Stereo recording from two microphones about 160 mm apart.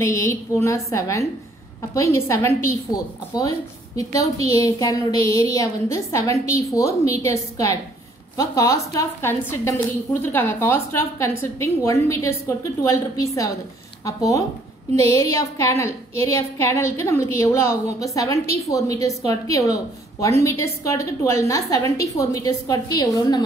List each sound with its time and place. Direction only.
0.0 s a woman's voice: 20° left (ahead or behind)